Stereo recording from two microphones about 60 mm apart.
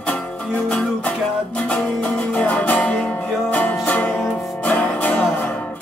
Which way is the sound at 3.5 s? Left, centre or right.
Left.